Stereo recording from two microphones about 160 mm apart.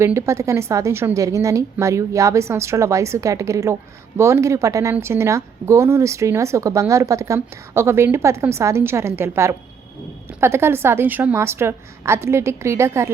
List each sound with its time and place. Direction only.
0.0 s a woman's voice: 15° right (ahead or behind)